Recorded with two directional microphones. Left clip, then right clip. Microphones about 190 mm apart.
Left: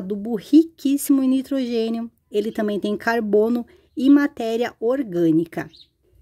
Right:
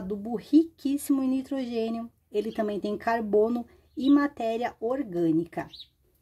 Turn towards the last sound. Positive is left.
turn(degrees=45)  # may be behind; listen again after turning